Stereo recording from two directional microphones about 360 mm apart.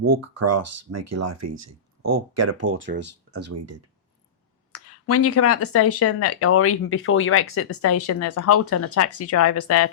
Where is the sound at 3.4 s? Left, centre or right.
Right.